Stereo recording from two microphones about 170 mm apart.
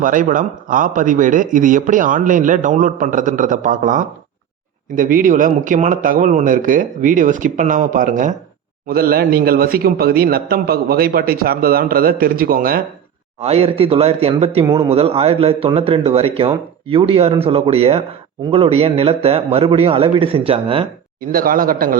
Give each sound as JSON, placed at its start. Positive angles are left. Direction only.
{"t": 0.0, "sound": "a man's voice", "side_deg": -50}
{"t": 8.9, "sound": "speech", "side_deg": -60}
{"t": 13.4, "sound": "speech", "side_deg": -35}
{"t": 21.2, "sound": "speech", "side_deg": -55}